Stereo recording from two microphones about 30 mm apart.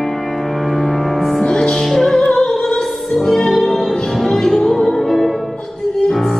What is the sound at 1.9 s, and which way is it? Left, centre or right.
Music, centre.